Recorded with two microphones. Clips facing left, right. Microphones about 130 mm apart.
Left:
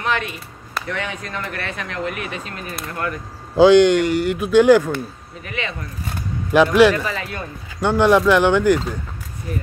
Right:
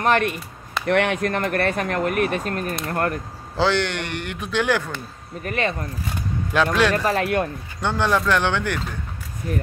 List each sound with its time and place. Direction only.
0.0 s speech: 50° right (ahead or behind)
0.8 s speech: 65° right (ahead or behind); by 3.2 s 50° right (ahead or behind)
3.5 s speech: 15° left (ahead or behind)
5.4 s speech: 45° right (ahead or behind)
6.5 s speech: 10° left (ahead or behind)
7.1 s speech: 60° right (ahead or behind)
7.8 s speech: 10° left (ahead or behind)